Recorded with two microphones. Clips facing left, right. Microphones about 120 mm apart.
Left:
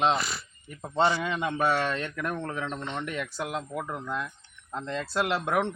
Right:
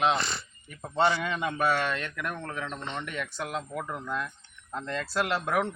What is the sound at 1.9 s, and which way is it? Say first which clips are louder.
Speech: left 3 dB; 30° left (ahead or behind).